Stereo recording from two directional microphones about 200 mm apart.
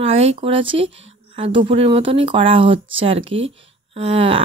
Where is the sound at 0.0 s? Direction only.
30° right (ahead or behind).